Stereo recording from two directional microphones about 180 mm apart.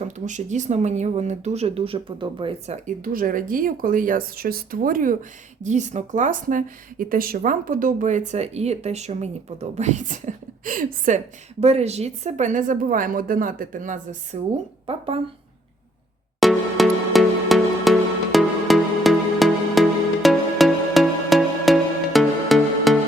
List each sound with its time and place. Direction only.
0.0 s speech: 40° right (ahead or behind)
11.6 s speech: 35° right (ahead or behind)
14.8 s a woman's voice: 30° right (ahead or behind)
16.4 s music: centre (ahead or behind)